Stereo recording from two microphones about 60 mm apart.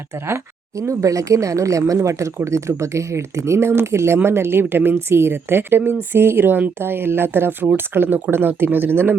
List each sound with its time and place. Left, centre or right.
0.3 s speech: right